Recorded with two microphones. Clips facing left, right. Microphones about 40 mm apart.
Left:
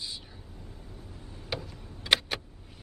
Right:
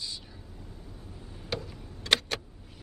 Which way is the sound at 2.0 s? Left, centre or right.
Centre.